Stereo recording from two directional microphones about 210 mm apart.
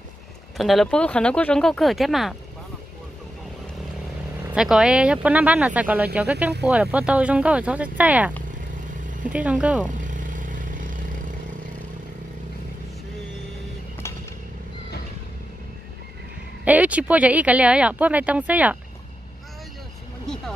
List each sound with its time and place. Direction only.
0.6 s speech: centre (ahead or behind)
4.5 s speech: 5° right (ahead or behind)
9.3 s speech: 5° right (ahead or behind)
9.9 s vehicle: 40° right (ahead or behind)
16.6 s speech: 5° right (ahead or behind)
20.3 s vehicle: centre (ahead or behind)